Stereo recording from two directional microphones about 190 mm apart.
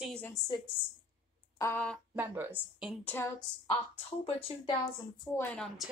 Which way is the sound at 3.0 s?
10° left (ahead or behind).